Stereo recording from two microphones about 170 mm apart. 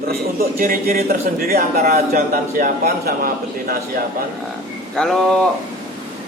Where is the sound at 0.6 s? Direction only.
60° right (ahead or behind).